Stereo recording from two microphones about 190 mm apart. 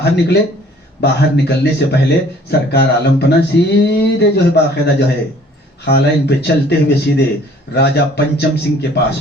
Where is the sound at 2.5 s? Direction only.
60° left (ahead or behind).